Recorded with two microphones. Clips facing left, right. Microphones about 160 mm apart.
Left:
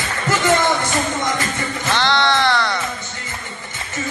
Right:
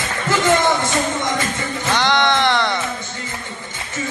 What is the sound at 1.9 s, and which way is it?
Music, 15° right (ahead or behind).